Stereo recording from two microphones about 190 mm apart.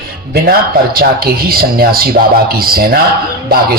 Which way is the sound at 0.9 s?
50° right (ahead or behind).